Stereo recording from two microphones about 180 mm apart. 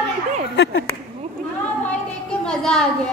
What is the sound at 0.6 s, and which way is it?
Speech, 70° left (ahead or behind).